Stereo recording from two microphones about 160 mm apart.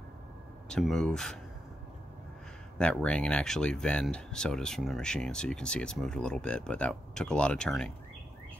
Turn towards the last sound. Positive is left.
turn(degrees=5)  # may be behind; listen again after turning